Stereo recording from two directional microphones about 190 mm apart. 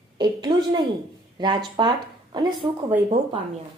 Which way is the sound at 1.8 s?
20° right (ahead or behind).